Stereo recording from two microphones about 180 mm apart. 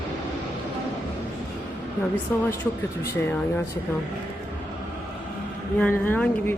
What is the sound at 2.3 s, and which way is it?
Speech, 15° left (ahead or behind).